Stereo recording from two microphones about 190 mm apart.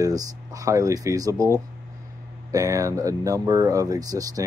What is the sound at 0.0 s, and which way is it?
Speech, 20° right (ahead or behind).